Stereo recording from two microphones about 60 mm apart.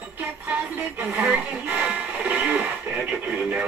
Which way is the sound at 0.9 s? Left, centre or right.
Right.